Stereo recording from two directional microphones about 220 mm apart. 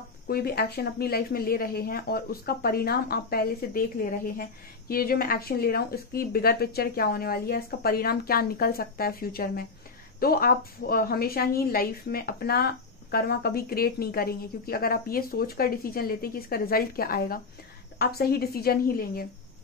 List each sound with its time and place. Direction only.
0.3 s speech: 45° left (ahead or behind)